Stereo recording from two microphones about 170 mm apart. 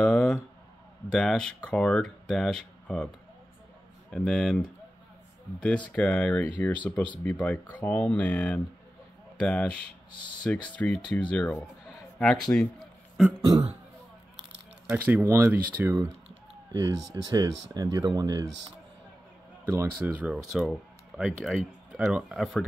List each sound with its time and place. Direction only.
0.0 s a sound: centre (ahead or behind)
1.1 s speech: 5° left (ahead or behind)
4.1 s speech: 5° left (ahead or behind)
5.9 s speech: 5° left (ahead or behind)
12.5 s a sound: 5° left (ahead or behind)
13.5 s speech: 20° right (ahead or behind)
14.9 s speech: 10° right (ahead or behind)
19.6 s speech: 15° right (ahead or behind)